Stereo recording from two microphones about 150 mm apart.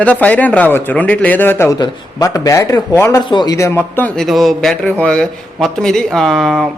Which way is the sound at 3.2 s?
30° left (ahead or behind).